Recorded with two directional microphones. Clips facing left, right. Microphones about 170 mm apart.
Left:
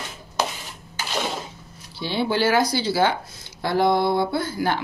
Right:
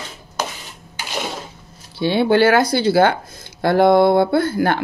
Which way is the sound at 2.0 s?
60° right (ahead or behind).